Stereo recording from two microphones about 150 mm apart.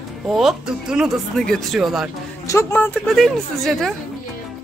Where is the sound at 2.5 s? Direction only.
20° left (ahead or behind).